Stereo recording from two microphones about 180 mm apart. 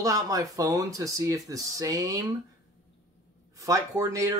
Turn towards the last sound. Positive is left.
turn(degrees=-20)  # may be behind; listen again after turning